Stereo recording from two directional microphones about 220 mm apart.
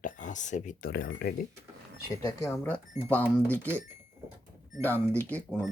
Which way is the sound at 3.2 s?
10° right (ahead or behind).